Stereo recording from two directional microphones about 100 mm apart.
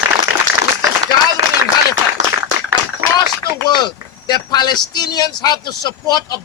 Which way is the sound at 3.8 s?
45° left (ahead or behind).